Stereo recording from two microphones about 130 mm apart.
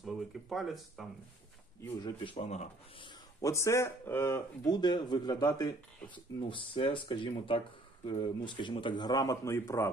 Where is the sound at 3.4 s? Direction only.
25° left (ahead or behind).